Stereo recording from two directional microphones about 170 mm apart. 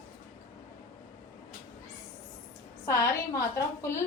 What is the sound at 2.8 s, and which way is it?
A woman's voice, 20° left (ahead or behind).